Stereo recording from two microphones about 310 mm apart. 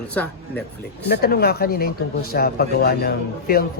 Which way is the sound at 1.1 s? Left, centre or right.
Left.